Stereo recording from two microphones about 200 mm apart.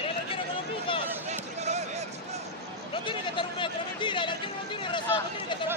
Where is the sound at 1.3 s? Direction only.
35° right (ahead or behind).